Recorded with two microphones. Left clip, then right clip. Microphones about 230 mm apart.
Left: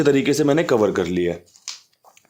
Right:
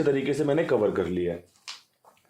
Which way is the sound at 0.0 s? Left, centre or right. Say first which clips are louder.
Left 7 dB; left.